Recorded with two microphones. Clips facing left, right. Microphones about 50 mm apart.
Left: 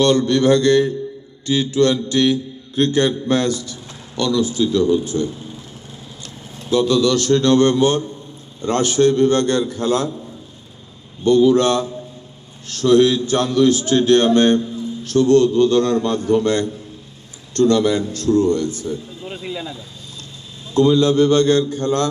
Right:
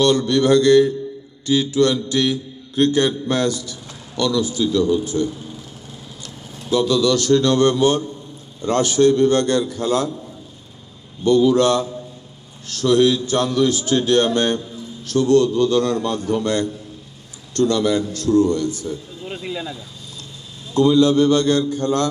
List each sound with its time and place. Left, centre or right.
0.0 s a man's voice: left
6.6 s a man's voice: left
11.2 s a man's voice: left
19.2 s speech: centre
20.7 s a man's voice: left